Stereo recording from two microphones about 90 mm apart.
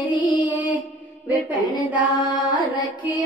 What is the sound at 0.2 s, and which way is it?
Music, 60° left (ahead or behind).